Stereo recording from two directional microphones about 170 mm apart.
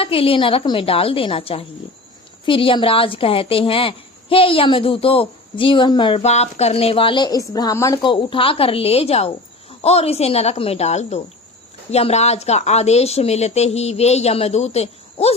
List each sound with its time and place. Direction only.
0.0 s a woman's voice: 35° left (ahead or behind)
8.1 s a woman's voice: 30° left (ahead or behind)